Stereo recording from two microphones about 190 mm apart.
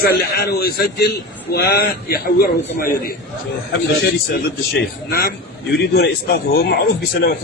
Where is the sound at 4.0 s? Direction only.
60° left (ahead or behind).